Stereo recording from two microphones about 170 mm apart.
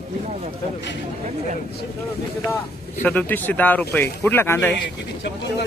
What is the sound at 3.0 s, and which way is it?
Speech, 10° left (ahead or behind).